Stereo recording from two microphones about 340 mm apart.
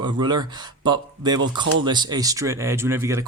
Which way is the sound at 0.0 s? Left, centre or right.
Centre.